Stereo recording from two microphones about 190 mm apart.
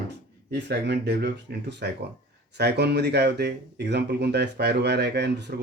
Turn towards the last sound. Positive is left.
turn(degrees=-65)  # may be behind; listen again after turning